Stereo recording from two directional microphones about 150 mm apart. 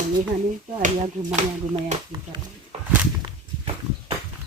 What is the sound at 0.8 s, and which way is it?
Speech, 55° right (ahead or behind).